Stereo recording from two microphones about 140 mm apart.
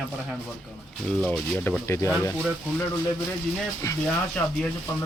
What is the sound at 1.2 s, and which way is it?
Speech, 15° left (ahead or behind).